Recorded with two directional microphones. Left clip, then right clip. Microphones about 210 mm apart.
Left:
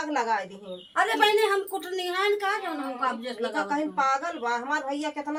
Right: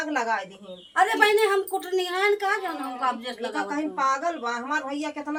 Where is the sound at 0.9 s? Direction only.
15° right (ahead or behind).